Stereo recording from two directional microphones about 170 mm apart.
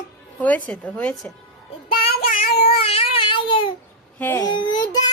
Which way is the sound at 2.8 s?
35° left (ahead or behind).